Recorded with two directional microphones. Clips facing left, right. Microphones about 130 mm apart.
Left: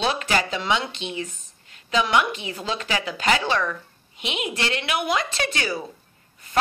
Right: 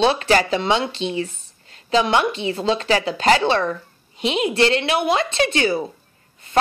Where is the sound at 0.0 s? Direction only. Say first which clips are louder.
Right 6 dB; 30° right (ahead or behind).